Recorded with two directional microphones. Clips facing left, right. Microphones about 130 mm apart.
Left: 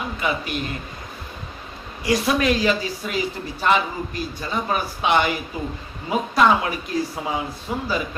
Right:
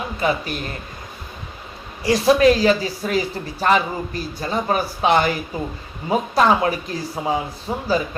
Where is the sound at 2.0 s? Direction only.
35° right (ahead or behind).